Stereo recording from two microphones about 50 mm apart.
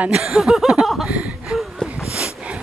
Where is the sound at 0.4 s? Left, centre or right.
Centre.